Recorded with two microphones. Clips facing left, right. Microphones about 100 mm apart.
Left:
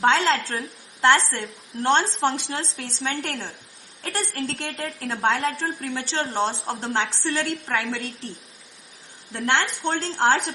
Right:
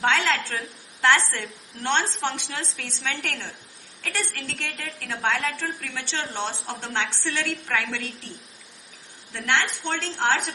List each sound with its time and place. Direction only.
0.0 s a woman's voice: 30° left (ahead or behind)
3.2 s a woman's voice: 20° left (ahead or behind)
4.0 s a woman's voice: 35° left (ahead or behind)
9.3 s a woman's voice: 35° left (ahead or behind)